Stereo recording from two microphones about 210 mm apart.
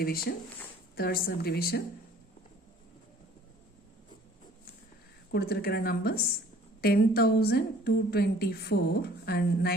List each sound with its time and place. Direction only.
0.0 s a woman's voice: 45° left (ahead or behind)
5.3 s a woman's voice: 50° left (ahead or behind)